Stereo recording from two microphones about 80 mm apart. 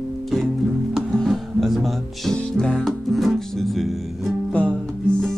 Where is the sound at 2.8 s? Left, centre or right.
Centre.